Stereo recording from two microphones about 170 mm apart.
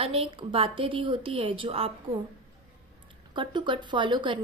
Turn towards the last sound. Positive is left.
turn(degrees=-30)  # may be behind; listen again after turning